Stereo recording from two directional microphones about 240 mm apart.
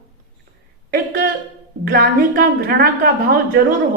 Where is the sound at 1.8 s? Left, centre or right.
Right.